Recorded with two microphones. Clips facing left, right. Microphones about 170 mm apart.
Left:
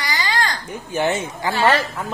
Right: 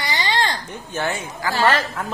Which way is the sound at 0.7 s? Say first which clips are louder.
Left 4 dB; 15° left (ahead or behind).